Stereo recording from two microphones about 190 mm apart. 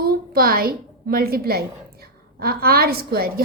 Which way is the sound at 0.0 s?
50° right (ahead or behind).